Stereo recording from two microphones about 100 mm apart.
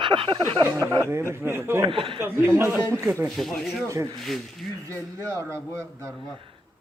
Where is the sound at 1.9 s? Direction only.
60° right (ahead or behind).